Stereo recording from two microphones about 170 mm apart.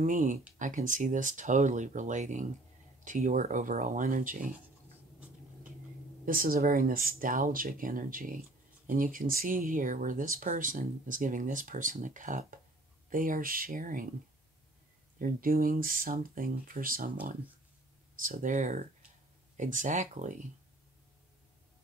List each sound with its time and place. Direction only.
0.0 s speech: 50° right (ahead or behind)
6.2 s speech: 55° right (ahead or behind)
15.1 s speech: 55° right (ahead or behind)